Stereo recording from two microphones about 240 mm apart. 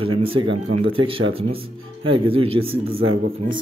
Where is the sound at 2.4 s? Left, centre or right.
Right.